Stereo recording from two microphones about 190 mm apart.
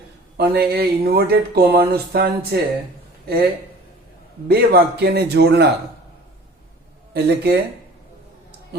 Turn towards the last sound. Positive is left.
turn(degrees=-60)  # may be behind; listen again after turning